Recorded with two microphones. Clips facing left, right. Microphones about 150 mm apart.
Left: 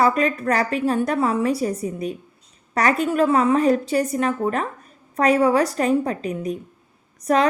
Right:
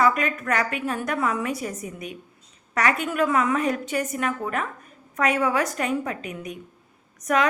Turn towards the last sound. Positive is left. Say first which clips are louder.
# left 4 dB
turn(degrees=30)  # may be behind; listen again after turning